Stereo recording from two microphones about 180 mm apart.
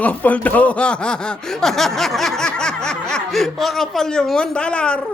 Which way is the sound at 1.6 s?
Centre (ahead or behind).